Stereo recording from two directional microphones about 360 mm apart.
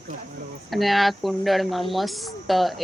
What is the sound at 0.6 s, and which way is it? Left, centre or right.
Speech, centre.